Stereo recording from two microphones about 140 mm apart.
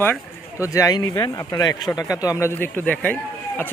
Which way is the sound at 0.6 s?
25° left (ahead or behind).